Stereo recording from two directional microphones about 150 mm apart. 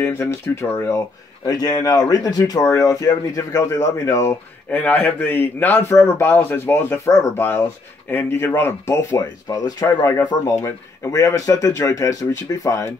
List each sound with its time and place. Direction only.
0.0 s speech: 15° left (ahead or behind)